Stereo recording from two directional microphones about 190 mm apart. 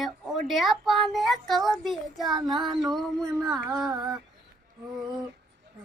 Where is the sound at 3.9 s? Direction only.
20° right (ahead or behind).